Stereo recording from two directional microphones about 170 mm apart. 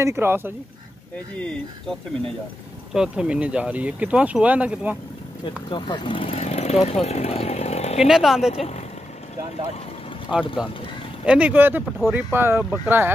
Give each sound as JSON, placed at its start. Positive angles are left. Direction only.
{"t": 0.0, "sound": "speech", "side_deg": -15}
{"t": 1.4, "sound": "speech", "side_deg": 5}
{"t": 5.4, "sound": "speech", "side_deg": 30}
{"t": 8.0, "sound": "speech", "side_deg": -5}
{"t": 8.5, "sound": "speech", "side_deg": 40}
{"t": 10.3, "sound": "speech", "side_deg": -5}